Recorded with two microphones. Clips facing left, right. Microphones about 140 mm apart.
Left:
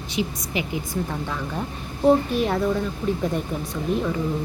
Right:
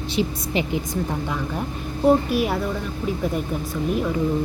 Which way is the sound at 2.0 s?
5° right (ahead or behind).